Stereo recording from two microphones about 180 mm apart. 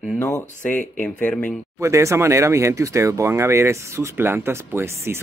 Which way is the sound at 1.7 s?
15° right (ahead or behind).